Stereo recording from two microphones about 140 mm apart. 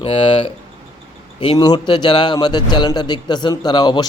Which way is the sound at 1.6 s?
30° left (ahead or behind).